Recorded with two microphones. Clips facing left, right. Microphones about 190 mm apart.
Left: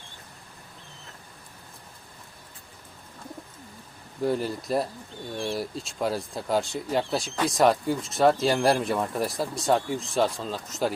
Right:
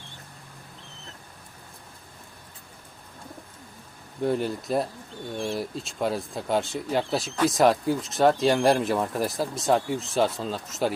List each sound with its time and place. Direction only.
4.2 s speech: centre (ahead or behind)